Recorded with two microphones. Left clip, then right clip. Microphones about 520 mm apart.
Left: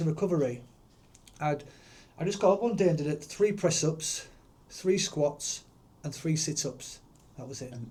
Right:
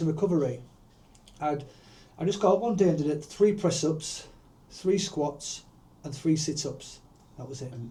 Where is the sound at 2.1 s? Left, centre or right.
Left.